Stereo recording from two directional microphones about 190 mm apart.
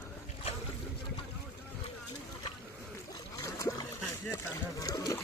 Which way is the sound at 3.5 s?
15° left (ahead or behind).